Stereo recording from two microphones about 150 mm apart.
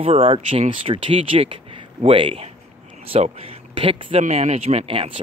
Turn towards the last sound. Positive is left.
turn(degrees=-40)  # may be behind; listen again after turning